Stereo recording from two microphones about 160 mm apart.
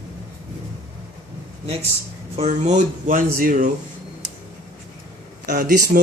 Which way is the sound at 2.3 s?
45° right (ahead or behind).